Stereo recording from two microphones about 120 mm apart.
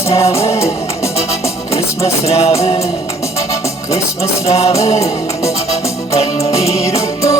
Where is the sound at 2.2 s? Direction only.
60° left (ahead or behind).